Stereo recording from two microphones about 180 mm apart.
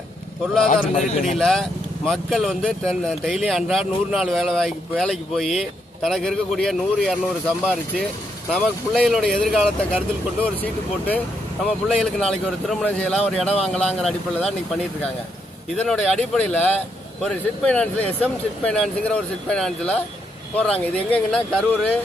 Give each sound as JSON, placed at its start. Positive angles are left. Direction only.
{"t": 0.7, "sound": "a man's voice", "side_deg": 40}
{"t": 1.4, "sound": "speech", "side_deg": 0}
{"t": 15.9, "sound": "speech", "side_deg": 0}